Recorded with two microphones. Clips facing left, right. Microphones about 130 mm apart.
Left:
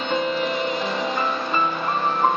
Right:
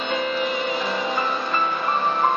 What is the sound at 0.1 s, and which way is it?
Music, 5° right (ahead or behind).